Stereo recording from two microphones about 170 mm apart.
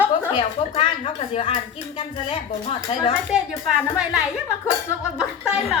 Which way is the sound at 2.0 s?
35° left (ahead or behind).